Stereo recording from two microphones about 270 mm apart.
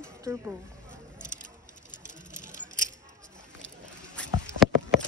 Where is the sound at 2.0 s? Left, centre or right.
Left.